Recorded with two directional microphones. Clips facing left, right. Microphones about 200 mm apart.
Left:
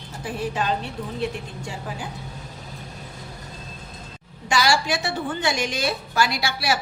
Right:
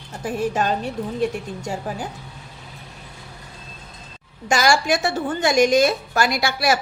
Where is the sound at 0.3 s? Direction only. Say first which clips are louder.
Right 4 dB; 45° right (ahead or behind).